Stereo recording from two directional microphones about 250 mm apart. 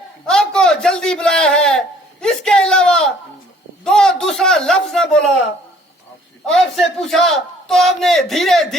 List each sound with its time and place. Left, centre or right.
0.3 s a man's voice: centre
6.5 s a man's voice: centre